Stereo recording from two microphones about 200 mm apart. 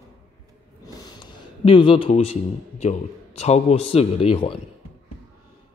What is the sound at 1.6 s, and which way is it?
Speech, 25° left (ahead or behind).